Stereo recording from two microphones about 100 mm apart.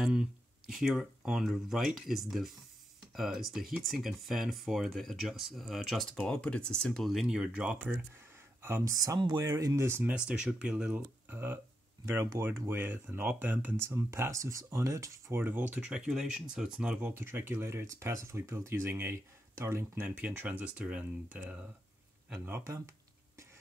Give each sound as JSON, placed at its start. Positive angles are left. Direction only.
{"t": 0.0, "sound": "speech", "side_deg": -5}
{"t": 6.1, "sound": "speech", "side_deg": 10}
{"t": 8.6, "sound": "speech", "side_deg": -25}
{"t": 8.9, "sound": "speech", "side_deg": -35}
{"t": 9.8, "sound": "speech", "side_deg": -20}
{"t": 10.1, "sound": "speech", "side_deg": -10}
{"t": 15.4, "sound": "speech", "side_deg": -20}
{"t": 15.9, "sound": "speech", "side_deg": -5}
{"t": 17.1, "sound": "speech", "side_deg": -25}
{"t": 20.2, "sound": "speech", "side_deg": -15}
{"t": 22.4, "sound": "speech", "side_deg": -25}